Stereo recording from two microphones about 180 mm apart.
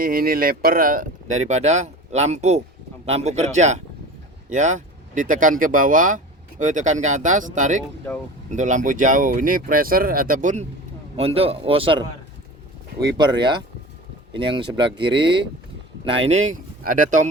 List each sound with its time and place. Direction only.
0.0 s speech: 55° right (ahead or behind)
7.8 s speech: 10° left (ahead or behind)
8.4 s speech: 45° right (ahead or behind)
11.2 s speech: 35° right (ahead or behind)
13.1 s speech: 25° right (ahead or behind)
16.0 s speech: 35° right (ahead or behind)